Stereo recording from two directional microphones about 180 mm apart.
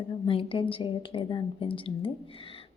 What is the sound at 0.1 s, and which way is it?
Speech, 30° left (ahead or behind).